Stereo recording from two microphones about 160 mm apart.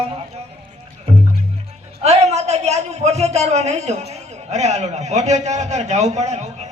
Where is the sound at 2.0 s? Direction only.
40° right (ahead or behind).